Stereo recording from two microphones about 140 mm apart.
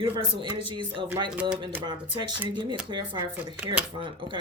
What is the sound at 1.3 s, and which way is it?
Speech, 10° right (ahead or behind).